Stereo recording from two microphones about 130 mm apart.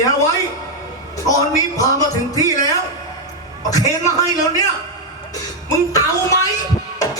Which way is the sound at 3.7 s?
30° left (ahead or behind).